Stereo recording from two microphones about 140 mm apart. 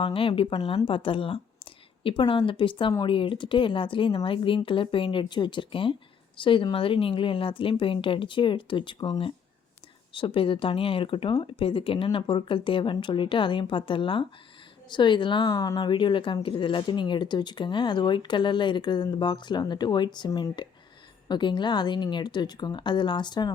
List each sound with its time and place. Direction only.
0.0 s speech: 40° left (ahead or behind)